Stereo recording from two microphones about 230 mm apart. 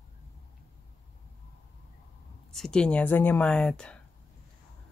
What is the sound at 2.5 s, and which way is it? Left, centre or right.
Speech, centre.